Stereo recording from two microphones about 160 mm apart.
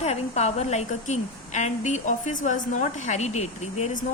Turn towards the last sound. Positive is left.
turn(degrees=45)  # may be behind; listen again after turning